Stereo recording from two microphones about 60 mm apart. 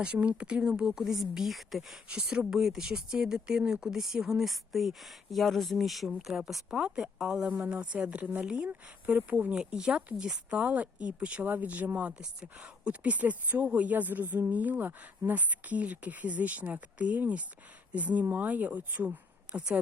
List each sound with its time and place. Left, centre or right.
0.0 s speech: right; by 2.0 s centre
2.0 s a woman's voice: centre